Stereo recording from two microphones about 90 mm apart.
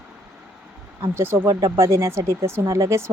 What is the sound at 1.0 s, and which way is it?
Speech, 30° right (ahead or behind).